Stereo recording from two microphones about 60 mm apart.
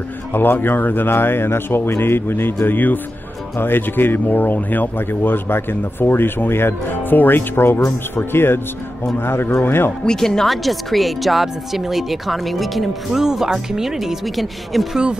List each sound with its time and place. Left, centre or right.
0.3 s speech: left
10.0 s speech: centre